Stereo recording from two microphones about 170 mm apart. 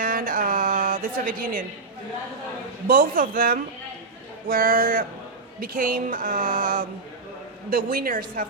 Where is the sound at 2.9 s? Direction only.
55° right (ahead or behind).